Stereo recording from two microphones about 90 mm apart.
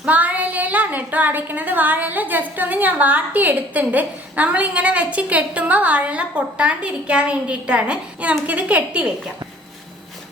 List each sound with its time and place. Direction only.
0.0 s a woman's voice: 15° right (ahead or behind)